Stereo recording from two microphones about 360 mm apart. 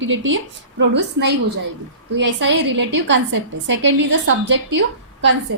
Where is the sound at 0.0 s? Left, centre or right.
Right.